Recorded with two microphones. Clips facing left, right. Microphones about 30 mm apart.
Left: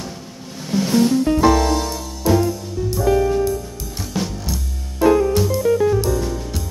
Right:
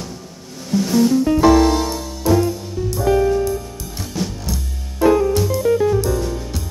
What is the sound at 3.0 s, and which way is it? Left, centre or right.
Music, centre.